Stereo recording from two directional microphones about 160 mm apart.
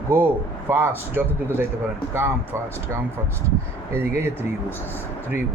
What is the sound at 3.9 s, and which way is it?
Speech, 15° right (ahead or behind).